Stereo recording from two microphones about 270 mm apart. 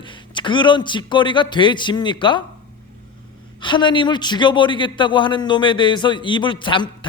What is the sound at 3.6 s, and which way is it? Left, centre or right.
A man's voice, centre.